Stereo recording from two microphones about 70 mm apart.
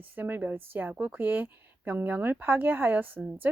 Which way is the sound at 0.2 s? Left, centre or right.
Right.